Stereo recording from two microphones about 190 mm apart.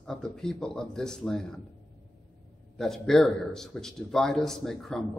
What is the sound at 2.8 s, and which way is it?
A man's voice, centre (ahead or behind).